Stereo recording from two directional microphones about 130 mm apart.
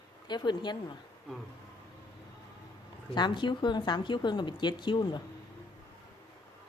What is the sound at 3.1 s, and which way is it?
Speech, 35° left (ahead or behind).